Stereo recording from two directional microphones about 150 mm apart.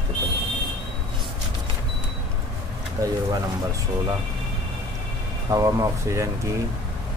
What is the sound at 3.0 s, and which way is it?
Speech, 20° right (ahead or behind).